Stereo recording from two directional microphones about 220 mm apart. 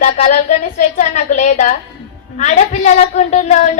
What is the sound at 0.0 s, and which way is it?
A woman's voice, 35° left (ahead or behind).